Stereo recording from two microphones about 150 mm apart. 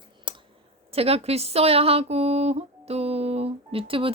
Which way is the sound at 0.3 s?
35° right (ahead or behind).